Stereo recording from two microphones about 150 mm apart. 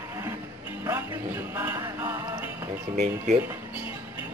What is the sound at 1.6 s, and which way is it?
Music, 15° right (ahead or behind).